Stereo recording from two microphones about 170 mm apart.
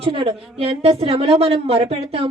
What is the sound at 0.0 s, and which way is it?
A woman's voice, 35° right (ahead or behind).